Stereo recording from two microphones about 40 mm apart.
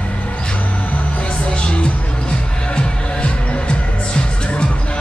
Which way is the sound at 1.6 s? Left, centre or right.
Left.